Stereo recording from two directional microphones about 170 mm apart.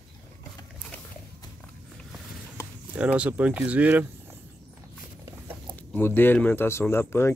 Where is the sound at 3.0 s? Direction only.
5° right (ahead or behind).